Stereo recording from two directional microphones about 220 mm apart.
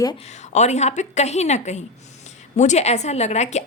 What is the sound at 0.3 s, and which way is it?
A woman's voice, 30° left (ahead or behind).